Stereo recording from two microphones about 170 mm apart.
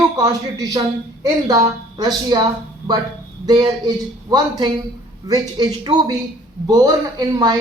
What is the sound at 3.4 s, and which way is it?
Speech, 25° right (ahead or behind).